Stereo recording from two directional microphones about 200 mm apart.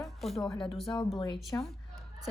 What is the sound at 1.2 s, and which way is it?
Speech, 25° left (ahead or behind).